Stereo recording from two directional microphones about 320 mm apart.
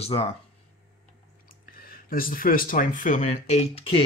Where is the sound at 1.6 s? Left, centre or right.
Left.